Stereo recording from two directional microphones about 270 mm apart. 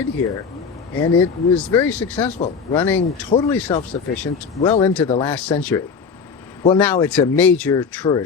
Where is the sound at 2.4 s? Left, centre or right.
Left.